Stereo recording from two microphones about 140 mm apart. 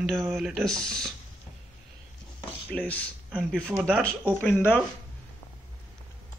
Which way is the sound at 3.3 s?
5° right (ahead or behind).